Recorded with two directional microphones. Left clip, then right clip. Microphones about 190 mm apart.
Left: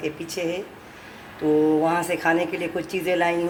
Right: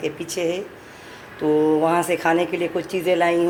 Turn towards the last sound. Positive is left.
turn(degrees=-10)  # may be behind; listen again after turning